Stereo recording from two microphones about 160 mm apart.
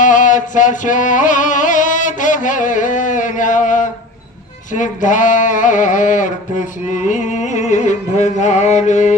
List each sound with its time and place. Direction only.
0.0 s music: 55° left (ahead or behind)